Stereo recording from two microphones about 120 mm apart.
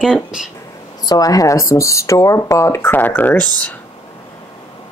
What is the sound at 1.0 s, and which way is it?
Speech, 30° left (ahead or behind).